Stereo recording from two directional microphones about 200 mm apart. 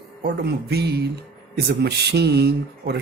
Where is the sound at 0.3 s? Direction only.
55° right (ahead or behind).